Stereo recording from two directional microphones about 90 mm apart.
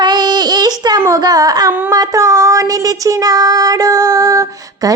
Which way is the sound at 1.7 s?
25° right (ahead or behind).